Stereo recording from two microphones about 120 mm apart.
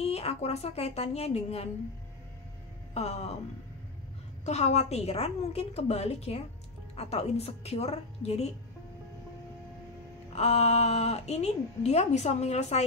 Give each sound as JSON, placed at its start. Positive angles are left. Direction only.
{"t": 0.0, "sound": "a woman's voice", "side_deg": 55}
{"t": 2.9, "sound": "a sound", "side_deg": 60}
{"t": 4.5, "sound": "a woman's voice", "side_deg": 65}
{"t": 10.3, "sound": "a woman's voice", "side_deg": 60}